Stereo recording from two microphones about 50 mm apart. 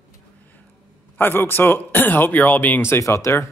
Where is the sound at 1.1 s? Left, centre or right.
Left.